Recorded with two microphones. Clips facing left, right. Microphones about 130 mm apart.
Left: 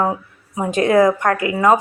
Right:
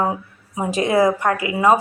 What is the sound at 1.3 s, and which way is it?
Speech, 40° left (ahead or behind).